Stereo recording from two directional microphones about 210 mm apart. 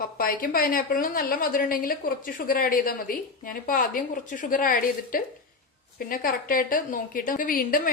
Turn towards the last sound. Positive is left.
turn(degrees=40)  # may be behind; listen again after turning